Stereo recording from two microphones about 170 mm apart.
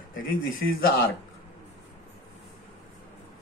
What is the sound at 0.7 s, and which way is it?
Speech, 60° left (ahead or behind).